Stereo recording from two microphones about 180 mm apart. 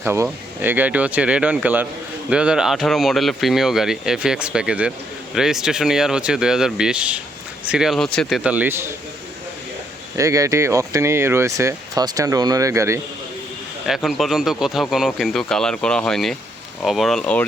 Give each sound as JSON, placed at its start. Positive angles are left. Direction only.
{"t": 0.0, "sound": "speech", "side_deg": -10}
{"t": 10.2, "sound": "speech", "side_deg": -15}
{"t": 13.8, "sound": "speech", "side_deg": 0}